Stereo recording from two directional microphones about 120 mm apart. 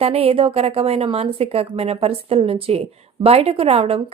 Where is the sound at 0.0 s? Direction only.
55° right (ahead or behind).